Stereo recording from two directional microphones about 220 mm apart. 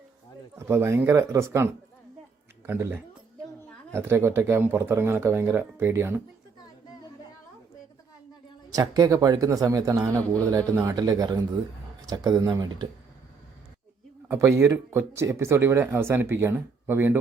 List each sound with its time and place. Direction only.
0.7 s speech: 10° right (ahead or behind)
8.7 s speech: 15° right (ahead or behind)
14.3 s speech: 10° right (ahead or behind)